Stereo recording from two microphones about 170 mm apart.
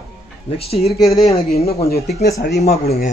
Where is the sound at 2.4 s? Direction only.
65° left (ahead or behind).